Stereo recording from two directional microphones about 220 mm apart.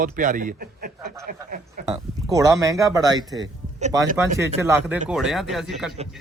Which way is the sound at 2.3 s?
15° right (ahead or behind).